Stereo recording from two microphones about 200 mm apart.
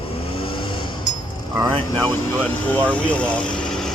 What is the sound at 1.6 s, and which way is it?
Speech, 20° right (ahead or behind).